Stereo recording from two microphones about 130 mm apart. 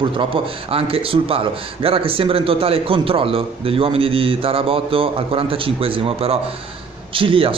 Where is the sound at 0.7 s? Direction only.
45° right (ahead or behind).